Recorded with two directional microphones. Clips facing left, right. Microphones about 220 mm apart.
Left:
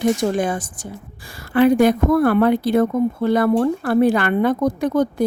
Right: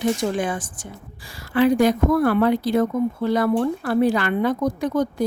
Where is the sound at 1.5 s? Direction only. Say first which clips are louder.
Left 3 dB; 55° left (ahead or behind).